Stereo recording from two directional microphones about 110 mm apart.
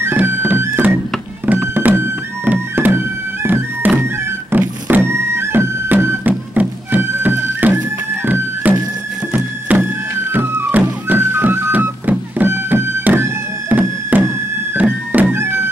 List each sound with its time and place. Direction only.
0.0 s music: 20° right (ahead or behind)